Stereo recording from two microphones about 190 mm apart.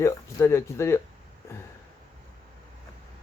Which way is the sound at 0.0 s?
15° left (ahead or behind).